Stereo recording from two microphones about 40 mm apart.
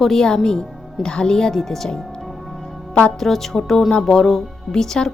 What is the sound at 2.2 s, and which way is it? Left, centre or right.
Music, centre.